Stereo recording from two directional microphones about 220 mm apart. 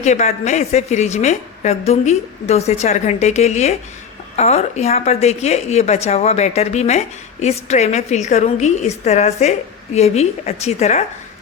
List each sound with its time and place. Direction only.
0.0 s a woman's voice: 30° left (ahead or behind)